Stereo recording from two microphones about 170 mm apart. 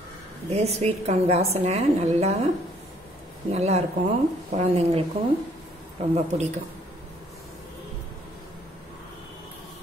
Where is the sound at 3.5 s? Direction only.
40° right (ahead or behind).